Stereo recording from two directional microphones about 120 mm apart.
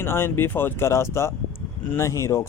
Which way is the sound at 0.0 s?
20° left (ahead or behind).